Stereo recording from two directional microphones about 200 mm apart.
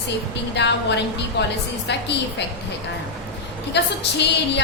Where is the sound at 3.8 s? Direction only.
60° left (ahead or behind).